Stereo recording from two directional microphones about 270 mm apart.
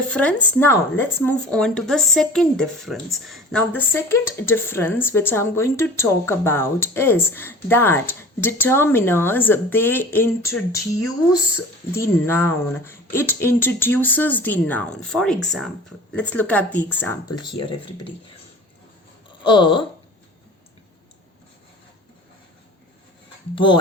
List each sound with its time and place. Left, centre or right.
0.1 s speech: centre
19.5 s speech: centre